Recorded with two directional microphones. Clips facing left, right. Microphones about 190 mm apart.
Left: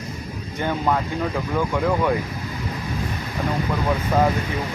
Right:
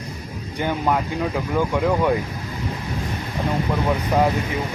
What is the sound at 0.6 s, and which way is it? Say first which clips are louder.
Speech: right 1 dB; 10° right (ahead or behind).